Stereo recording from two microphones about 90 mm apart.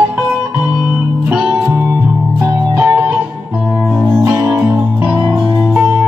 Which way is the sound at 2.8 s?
25° right (ahead or behind).